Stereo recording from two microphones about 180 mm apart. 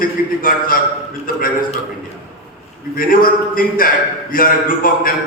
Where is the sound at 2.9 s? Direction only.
50° left (ahead or behind).